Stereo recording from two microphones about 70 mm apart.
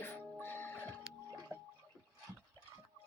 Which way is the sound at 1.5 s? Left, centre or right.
Right.